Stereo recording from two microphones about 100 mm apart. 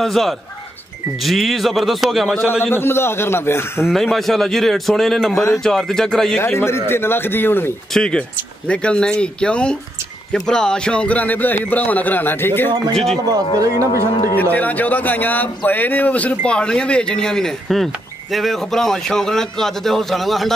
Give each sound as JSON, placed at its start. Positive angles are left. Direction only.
{"t": 0.0, "sound": "speech", "side_deg": 0}
{"t": 2.6, "sound": "a man's voice", "side_deg": 25}
{"t": 3.9, "sound": "speech", "side_deg": 0}
{"t": 5.3, "sound": "speech", "side_deg": 30}
{"t": 5.6, "sound": "speech", "side_deg": 5}
{"t": 6.3, "sound": "a man's voice", "side_deg": 25}
{"t": 7.9, "sound": "speech", "side_deg": 10}
{"t": 12.9, "sound": "speech", "side_deg": 5}
{"t": 13.3, "sound": "speech", "side_deg": -35}
{"t": 14.2, "sound": "speech", "side_deg": 20}